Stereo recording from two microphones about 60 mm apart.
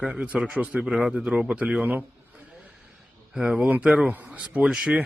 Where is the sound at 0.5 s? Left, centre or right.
Right.